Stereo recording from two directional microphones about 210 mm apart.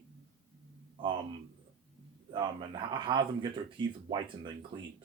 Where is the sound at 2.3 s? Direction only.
20° right (ahead or behind).